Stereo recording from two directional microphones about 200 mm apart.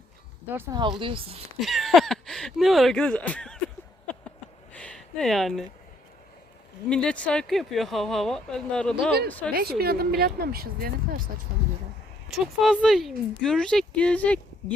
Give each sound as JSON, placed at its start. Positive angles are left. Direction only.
{"t": 0.5, "sound": "speech", "side_deg": -10}
{"t": 0.8, "sound": "speech", "side_deg": -25}
{"t": 1.5, "sound": "speech", "side_deg": 0}
{"t": 4.7, "sound": "a sound", "side_deg": 5}
{"t": 6.9, "sound": "speech", "side_deg": 5}
{"t": 9.5, "sound": "speech", "side_deg": -50}
{"t": 11.5, "sound": "a sound", "side_deg": -45}
{"t": 12.3, "sound": "speech", "side_deg": 0}